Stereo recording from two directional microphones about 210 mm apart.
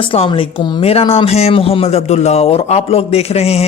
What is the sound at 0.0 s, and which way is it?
Speech, 25° left (ahead or behind).